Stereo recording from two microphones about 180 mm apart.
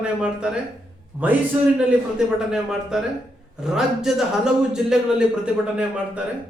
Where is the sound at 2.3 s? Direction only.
5° right (ahead or behind).